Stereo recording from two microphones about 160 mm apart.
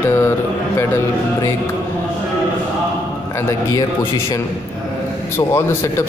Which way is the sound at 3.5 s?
20° left (ahead or behind).